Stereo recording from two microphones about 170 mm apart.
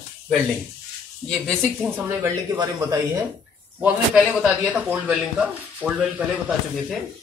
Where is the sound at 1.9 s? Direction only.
15° right (ahead or behind).